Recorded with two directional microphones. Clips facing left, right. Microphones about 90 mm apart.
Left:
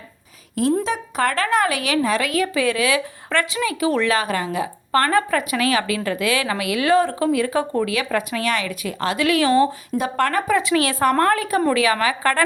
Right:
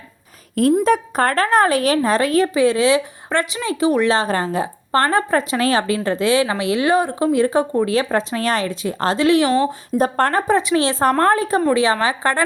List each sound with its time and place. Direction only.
0.9 s a woman's voice: 40° right (ahead or behind)
6.9 s a woman's voice: 15° right (ahead or behind)
10.0 s a woman's voice: 35° right (ahead or behind)